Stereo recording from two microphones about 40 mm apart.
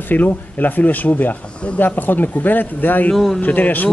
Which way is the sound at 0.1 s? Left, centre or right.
Left.